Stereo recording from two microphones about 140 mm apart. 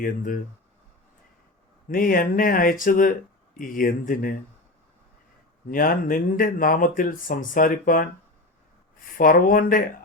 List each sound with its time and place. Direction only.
0.0 s speech: 75° left (ahead or behind)
1.9 s speech: 85° left
5.7 s speech: 90° left
9.1 s speech: 85° left